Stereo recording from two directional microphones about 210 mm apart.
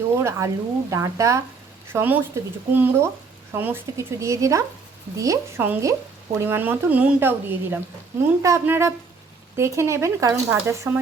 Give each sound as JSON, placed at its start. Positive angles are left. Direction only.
{"t": 0.2, "sound": "speech", "side_deg": -15}